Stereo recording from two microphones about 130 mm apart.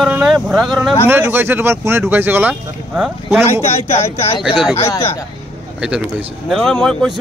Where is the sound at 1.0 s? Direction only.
15° right (ahead or behind).